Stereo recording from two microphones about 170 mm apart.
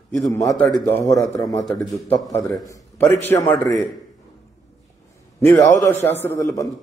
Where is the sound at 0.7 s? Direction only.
15° left (ahead or behind).